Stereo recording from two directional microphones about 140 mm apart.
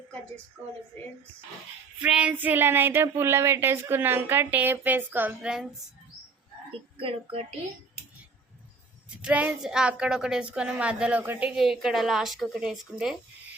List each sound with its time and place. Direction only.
2.0 s child singing: 10° right (ahead or behind)
7.0 s speech: 40° right (ahead or behind)
9.2 s a woman's voice: 10° right (ahead or behind)